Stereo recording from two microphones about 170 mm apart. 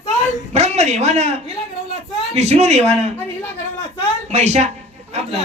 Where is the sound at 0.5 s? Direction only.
40° right (ahead or behind).